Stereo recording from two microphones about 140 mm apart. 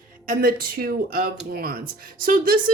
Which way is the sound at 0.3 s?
90° right.